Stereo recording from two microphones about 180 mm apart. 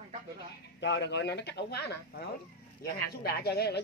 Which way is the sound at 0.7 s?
80° left.